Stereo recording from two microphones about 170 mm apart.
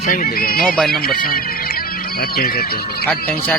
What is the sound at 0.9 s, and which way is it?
Speech, 60° left (ahead or behind).